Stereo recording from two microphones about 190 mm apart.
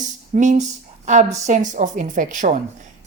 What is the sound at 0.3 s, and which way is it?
Speech, 40° right (ahead or behind).